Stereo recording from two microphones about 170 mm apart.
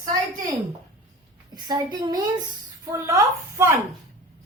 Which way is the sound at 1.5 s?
25° right (ahead or behind).